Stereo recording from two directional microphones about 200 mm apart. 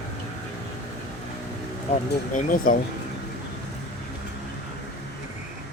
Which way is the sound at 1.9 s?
40° left (ahead or behind).